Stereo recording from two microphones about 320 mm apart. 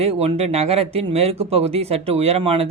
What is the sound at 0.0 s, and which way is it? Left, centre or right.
A man's voice, centre.